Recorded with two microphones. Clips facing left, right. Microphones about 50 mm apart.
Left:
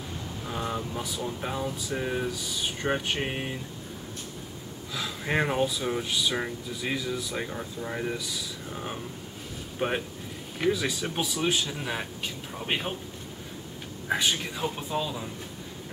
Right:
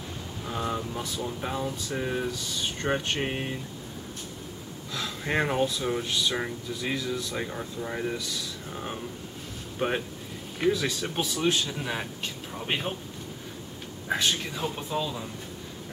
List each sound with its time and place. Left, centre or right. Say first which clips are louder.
0.5 s speech: right 1 dB; centre
4.9 s speech: even; centre
14.0 s speech: even; centre